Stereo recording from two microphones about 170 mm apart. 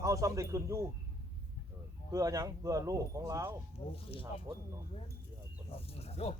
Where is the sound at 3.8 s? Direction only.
35° left (ahead or behind).